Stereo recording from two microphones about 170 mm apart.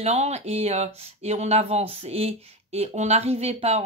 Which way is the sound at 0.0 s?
40° right (ahead or behind).